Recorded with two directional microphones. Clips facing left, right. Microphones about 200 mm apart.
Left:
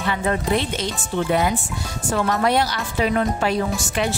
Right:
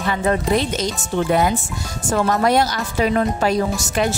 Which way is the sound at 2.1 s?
45° right (ahead or behind).